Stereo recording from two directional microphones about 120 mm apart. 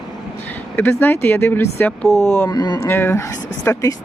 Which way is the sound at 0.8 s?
15° left (ahead or behind).